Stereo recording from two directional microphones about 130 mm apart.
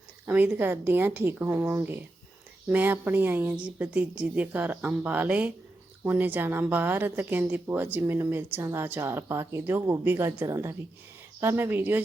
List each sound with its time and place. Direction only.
0.3 s speech: 15° right (ahead or behind)